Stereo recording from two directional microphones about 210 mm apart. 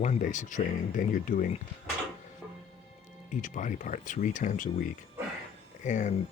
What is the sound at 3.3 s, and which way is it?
Speech, 35° left (ahead or behind).